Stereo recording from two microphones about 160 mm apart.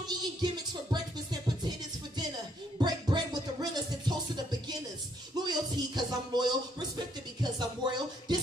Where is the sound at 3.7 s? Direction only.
25° right (ahead or behind).